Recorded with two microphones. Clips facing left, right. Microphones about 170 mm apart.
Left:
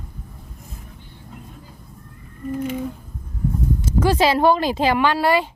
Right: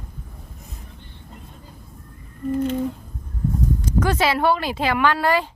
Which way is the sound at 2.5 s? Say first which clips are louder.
Right 3 dB; 10° left (ahead or behind).